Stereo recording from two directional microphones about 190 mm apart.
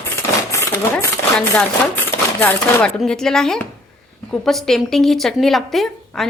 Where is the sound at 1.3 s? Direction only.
10° left (ahead or behind).